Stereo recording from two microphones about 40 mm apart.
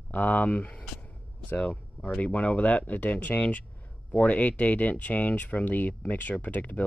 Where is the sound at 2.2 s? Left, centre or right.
Left.